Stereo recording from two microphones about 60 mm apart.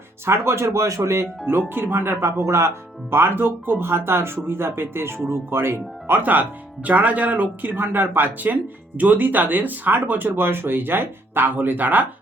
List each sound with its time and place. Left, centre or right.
0.3 s speech: right
1.7 s speech: right
2.5 s speech: right
6.8 s speech: right